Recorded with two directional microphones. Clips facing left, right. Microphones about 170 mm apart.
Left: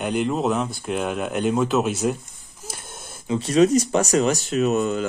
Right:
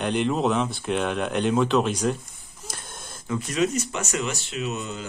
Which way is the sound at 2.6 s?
5° left (ahead or behind).